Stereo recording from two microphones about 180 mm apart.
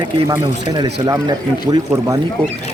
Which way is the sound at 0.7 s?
25° right (ahead or behind).